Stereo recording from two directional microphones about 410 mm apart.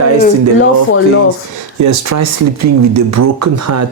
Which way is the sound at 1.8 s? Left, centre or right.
Right.